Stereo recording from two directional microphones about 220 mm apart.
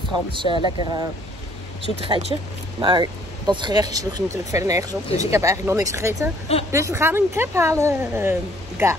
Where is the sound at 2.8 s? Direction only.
20° right (ahead or behind).